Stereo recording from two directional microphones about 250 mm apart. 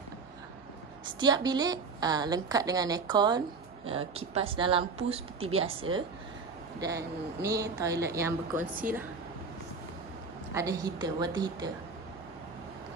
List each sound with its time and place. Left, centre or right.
1.0 s a woman's voice: centre
6.8 s a woman's voice: centre
10.5 s a woman's voice: centre